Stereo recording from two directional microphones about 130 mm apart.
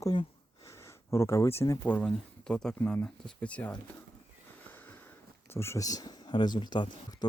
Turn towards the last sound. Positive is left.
turn(degrees=35)  # may be behind; listen again after turning